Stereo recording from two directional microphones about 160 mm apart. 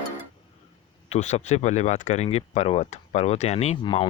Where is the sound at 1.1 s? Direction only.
45° left (ahead or behind).